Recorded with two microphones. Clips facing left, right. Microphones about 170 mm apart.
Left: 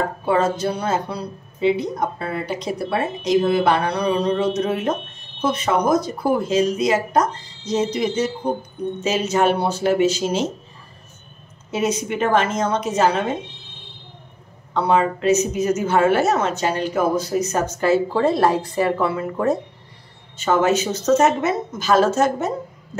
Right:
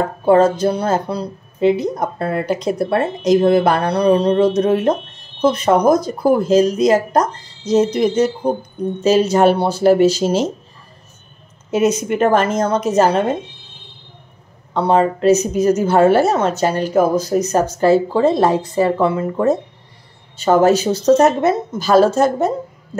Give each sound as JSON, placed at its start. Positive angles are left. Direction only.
{"t": 0.2, "sound": "a woman's voice", "side_deg": -40}
{"t": 11.7, "sound": "a woman's voice", "side_deg": -45}
{"t": 14.7, "sound": "a woman's voice", "side_deg": -35}
{"t": 20.3, "sound": "a woman's voice", "side_deg": -35}